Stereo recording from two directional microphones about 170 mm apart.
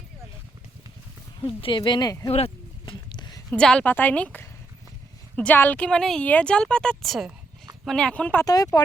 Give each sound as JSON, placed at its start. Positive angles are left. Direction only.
{"t": 1.6, "sound": "speech", "side_deg": 30}
{"t": 2.3, "sound": "a sound", "side_deg": 35}
{"t": 3.5, "sound": "a woman's voice", "side_deg": 5}
{"t": 8.4, "sound": "speech", "side_deg": 20}